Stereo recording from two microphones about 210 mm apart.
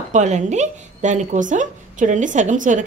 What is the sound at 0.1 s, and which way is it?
A woman's voice, 35° right (ahead or behind).